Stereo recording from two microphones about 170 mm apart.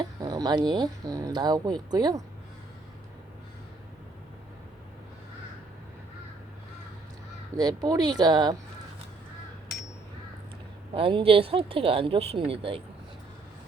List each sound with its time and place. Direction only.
0.0 s speech: 20° right (ahead or behind)
7.5 s speech: 25° right (ahead or behind)
10.9 s a woman's voice: 30° right (ahead or behind)